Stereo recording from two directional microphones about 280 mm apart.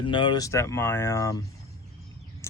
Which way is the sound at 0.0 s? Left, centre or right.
Centre.